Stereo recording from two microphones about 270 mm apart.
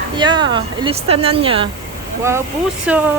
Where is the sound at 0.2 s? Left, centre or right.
Centre.